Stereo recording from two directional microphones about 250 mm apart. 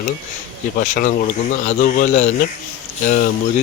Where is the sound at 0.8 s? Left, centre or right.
Left.